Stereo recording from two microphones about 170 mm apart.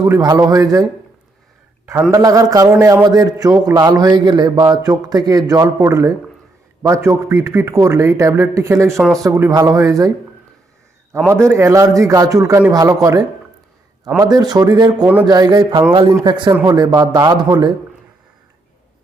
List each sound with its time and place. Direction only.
0.0 s a man's voice: 20° right (ahead or behind)
1.9 s a man's voice: 20° right (ahead or behind)
11.3 s a man's voice: 15° right (ahead or behind)